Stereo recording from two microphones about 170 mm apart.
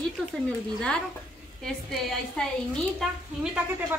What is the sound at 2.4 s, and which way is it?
Speech, 5° left (ahead or behind).